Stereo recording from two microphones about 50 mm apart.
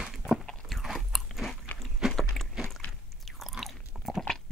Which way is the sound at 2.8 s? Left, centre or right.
Left.